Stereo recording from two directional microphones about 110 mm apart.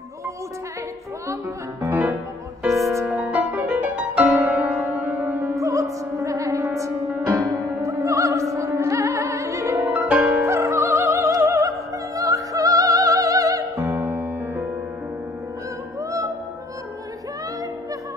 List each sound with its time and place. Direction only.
1.3 s speech: 30° right (ahead or behind)
3.1 s music: 10° right (ahead or behind)
5.6 s music: 30° right (ahead or behind)
9.8 s music: 15° right (ahead or behind)
12.2 s opera: 30° right (ahead or behind)
13.7 s music: 20° right (ahead or behind)
16.0 s music: 30° right (ahead or behind)